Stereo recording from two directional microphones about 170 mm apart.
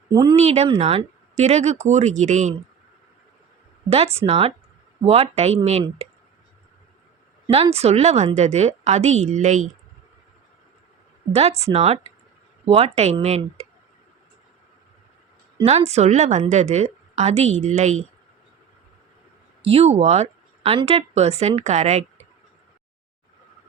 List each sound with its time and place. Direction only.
0.1 s speech: 25° right (ahead or behind)
0.3 s speech: 40° right (ahead or behind)
3.8 s speech: 35° right (ahead or behind)
7.5 s speech: 35° right (ahead or behind)
11.3 s speech: 40° right (ahead or behind)
15.6 s speech: 40° right (ahead or behind)
19.6 s speech: 35° right (ahead or behind)